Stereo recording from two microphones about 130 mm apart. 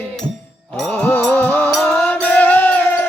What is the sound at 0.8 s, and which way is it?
Mantra, 10° left (ahead or behind).